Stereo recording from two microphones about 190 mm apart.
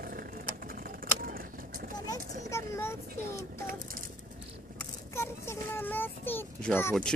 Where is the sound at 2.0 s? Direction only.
15° left (ahead or behind).